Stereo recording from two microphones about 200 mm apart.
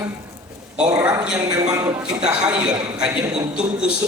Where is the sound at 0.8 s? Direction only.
5° right (ahead or behind).